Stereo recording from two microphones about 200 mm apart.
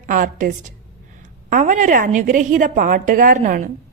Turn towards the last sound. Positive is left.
turn(degrees=-40)  # may be behind; listen again after turning